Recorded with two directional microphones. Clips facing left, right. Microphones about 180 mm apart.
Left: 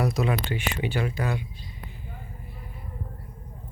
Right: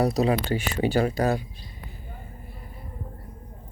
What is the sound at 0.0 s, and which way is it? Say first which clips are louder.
Speech: right 4 dB; 35° right (ahead or behind).